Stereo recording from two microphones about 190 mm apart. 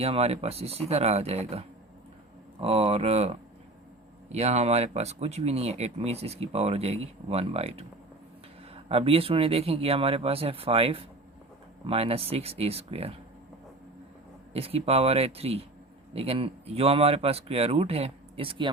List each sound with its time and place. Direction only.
0.0 s speech: 30° right (ahead or behind)
14.5 s speech: 30° right (ahead or behind)